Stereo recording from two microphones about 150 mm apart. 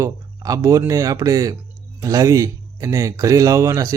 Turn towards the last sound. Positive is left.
turn(degrees=-20)  # may be behind; listen again after turning